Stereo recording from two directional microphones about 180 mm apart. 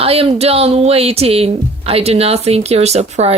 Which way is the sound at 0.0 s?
35° right (ahead or behind).